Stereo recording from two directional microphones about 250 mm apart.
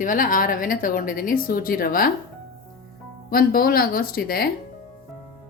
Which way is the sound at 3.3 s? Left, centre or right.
Left.